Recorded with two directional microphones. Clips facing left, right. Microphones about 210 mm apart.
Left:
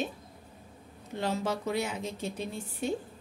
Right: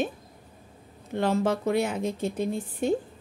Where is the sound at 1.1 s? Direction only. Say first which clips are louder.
Right 7 dB; 55° right (ahead or behind).